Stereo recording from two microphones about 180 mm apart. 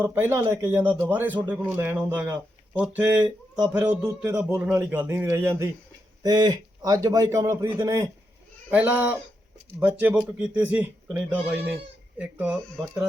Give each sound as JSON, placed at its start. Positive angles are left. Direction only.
{"t": 0.0, "sound": "a man's voice", "side_deg": -10}
{"t": 12.6, "sound": "speech", "side_deg": 5}